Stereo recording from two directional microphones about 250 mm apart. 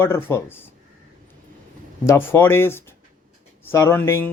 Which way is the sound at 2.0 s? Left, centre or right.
Centre.